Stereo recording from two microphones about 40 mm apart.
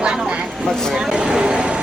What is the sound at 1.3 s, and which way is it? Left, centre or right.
Vehicle, right.